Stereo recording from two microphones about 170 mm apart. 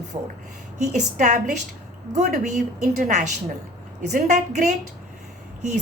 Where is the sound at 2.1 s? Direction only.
45° right (ahead or behind).